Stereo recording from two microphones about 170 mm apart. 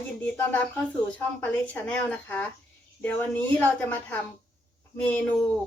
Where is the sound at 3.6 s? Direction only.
10° left (ahead or behind).